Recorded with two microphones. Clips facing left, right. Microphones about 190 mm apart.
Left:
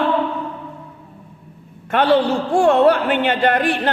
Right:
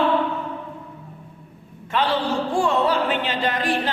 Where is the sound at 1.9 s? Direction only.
60° left (ahead or behind).